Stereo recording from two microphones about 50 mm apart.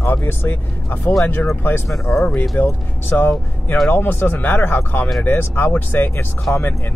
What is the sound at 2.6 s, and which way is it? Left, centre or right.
Speech, left.